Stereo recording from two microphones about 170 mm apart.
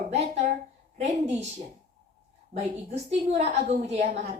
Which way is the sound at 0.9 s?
40° right (ahead or behind).